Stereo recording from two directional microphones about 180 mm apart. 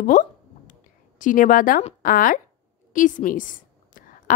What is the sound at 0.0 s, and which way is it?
Speech, 45° left (ahead or behind).